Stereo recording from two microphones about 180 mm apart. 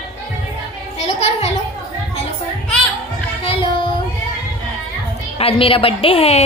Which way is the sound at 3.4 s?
30° left (ahead or behind).